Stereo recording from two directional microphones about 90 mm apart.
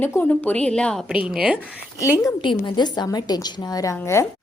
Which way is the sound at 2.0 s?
30° left (ahead or behind).